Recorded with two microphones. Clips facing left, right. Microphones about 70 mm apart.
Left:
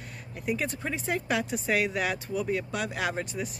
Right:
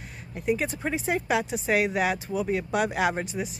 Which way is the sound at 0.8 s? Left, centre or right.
Centre.